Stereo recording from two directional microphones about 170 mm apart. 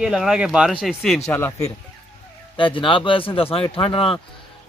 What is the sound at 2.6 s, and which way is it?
Speech, 30° left (ahead or behind).